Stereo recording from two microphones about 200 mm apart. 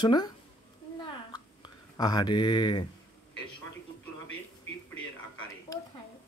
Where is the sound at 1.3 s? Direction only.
20° left (ahead or behind).